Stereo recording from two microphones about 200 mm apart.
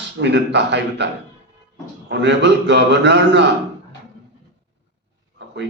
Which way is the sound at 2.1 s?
60° right (ahead or behind).